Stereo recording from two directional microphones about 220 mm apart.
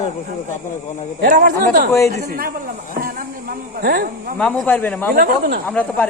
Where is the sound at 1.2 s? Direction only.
40° right (ahead or behind).